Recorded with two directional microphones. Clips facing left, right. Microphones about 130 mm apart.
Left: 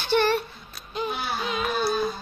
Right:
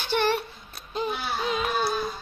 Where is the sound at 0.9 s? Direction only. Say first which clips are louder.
Even; 30° right (ahead or behind).